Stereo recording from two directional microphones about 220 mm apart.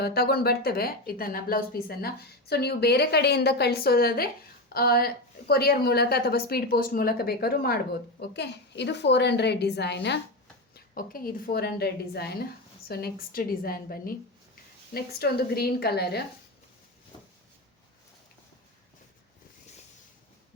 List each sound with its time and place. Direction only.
0.0 s speech: 45° left (ahead or behind)
10.8 s a woman's voice: 40° left (ahead or behind)